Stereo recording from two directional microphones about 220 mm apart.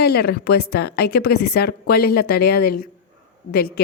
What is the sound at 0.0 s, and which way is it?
A woman's voice, 45° left (ahead or behind).